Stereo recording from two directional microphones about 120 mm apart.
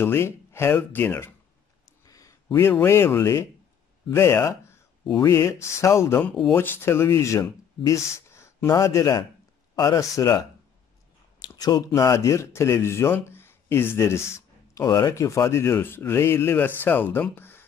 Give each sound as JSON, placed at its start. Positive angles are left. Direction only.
{"t": 0.0, "sound": "speech", "side_deg": 20}